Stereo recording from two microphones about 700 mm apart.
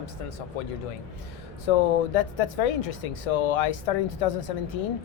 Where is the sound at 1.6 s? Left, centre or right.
Left.